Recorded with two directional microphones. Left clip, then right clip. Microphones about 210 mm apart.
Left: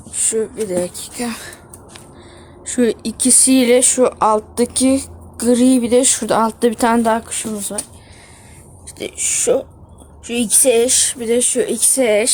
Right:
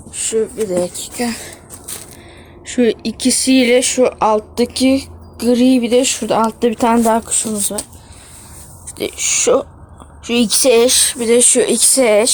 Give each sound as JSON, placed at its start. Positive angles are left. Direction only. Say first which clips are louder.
{"t": 0.2, "sound": "speech", "louder": "right 2 dB", "side_deg": -5}
{"t": 2.8, "sound": "speech", "louder": "right 2 dB", "side_deg": 35}
{"t": 4.2, "sound": "speech", "louder": "right 1 dB", "side_deg": -5}
{"t": 4.6, "sound": "speech", "louder": "right 1 dB", "side_deg": 40}
{"t": 6.0, "sound": "speech", "louder": "right 1 dB", "side_deg": 0}
{"t": 7.0, "sound": "speech", "louder": "right 2 dB", "side_deg": -20}
{"t": 9.0, "sound": "speech", "louder": "right 4 dB", "side_deg": -10}